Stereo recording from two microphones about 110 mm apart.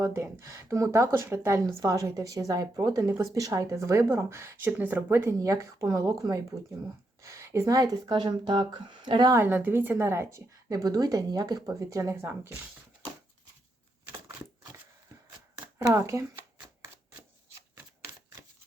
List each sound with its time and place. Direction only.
0.0 s speech: 25° right (ahead or behind); by 9.3 s 40° right (ahead or behind)
9.3 s speech: 20° right (ahead or behind)
15.6 s speech: 35° right (ahead or behind)
17.7 s typewriter: 25° right (ahead or behind)